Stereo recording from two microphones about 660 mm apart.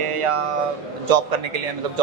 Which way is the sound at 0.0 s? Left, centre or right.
Right.